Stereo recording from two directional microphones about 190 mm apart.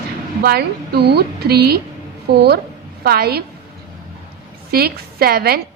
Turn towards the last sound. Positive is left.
turn(degrees=-55)  # may be behind; listen again after turning